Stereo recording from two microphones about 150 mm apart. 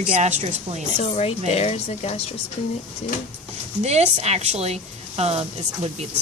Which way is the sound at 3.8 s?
45° right (ahead or behind).